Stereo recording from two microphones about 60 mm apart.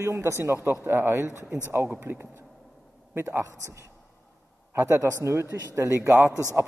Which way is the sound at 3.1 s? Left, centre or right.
Right.